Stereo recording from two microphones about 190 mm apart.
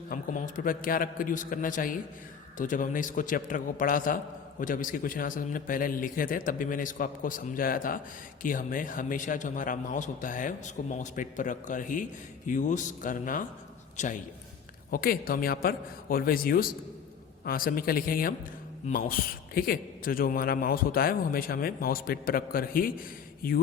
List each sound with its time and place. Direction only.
0.1 s a man's voice: 45° left (ahead or behind)
14.8 s a man's voice: 50° left (ahead or behind)